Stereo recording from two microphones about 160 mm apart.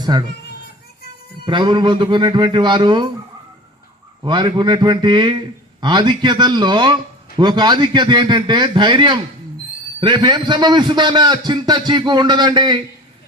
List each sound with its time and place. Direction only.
0.0 s speech: 25° right (ahead or behind)
1.5 s a man's voice: 30° right (ahead or behind)
4.2 s a man's voice: 25° right (ahead or behind)